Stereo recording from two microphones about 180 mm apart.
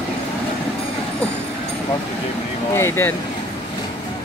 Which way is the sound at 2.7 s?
15° left (ahead or behind).